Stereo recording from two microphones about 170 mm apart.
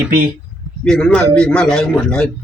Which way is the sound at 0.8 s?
5° left (ahead or behind).